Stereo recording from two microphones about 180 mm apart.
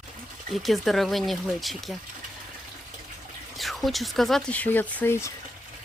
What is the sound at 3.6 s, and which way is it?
Speech, centre (ahead or behind).